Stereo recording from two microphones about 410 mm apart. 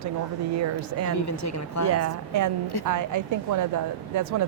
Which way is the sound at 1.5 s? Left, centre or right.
Left.